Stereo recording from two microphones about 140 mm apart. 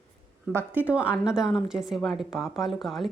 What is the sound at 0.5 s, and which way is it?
A woman's voice, 15° right (ahead or behind).